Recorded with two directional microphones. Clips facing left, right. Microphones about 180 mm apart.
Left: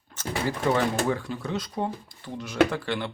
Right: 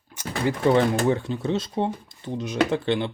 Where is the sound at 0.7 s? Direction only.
25° right (ahead or behind).